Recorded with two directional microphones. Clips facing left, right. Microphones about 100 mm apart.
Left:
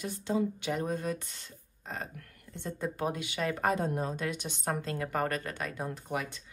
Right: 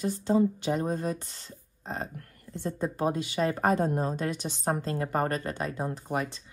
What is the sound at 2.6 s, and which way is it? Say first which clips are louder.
Speech: right 5 dB; 45° right (ahead or behind).